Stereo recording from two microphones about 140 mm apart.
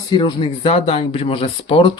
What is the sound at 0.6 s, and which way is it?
Speech, 45° left (ahead or behind).